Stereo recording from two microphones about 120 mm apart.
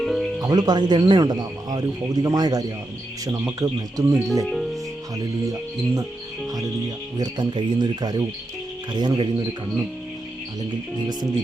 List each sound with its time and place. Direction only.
0.0 s music: centre (ahead or behind)
0.4 s speech: 35° right (ahead or behind)
4.4 s music: centre (ahead or behind)
5.1 s speech: 30° right (ahead or behind)
7.2 s speech: 35° right (ahead or behind)